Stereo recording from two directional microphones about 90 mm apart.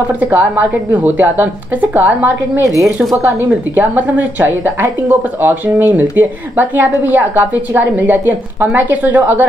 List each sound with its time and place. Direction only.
0.2 s a woman's voice: 20° right (ahead or behind)